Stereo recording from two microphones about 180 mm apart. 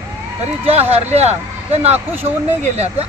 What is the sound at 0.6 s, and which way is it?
Speech, 35° right (ahead or behind).